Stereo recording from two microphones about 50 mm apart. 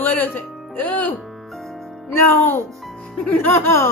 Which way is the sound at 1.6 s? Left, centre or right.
Centre.